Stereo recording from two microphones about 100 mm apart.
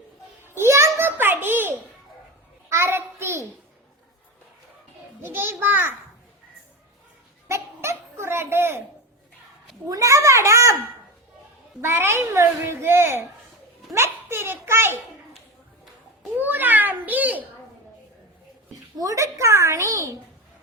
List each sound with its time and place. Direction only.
0.4 s a sound: 25° right (ahead or behind)
5.2 s a woman's voice: 20° right (ahead or behind)
7.4 s a sound: 25° right (ahead or behind)
9.9 s a child's voice: 35° right (ahead or behind)
11.8 s a woman's voice: 25° right (ahead or behind)
16.4 s a child's voice: 20° right (ahead or behind)
18.9 s a child's voice: 35° right (ahead or behind)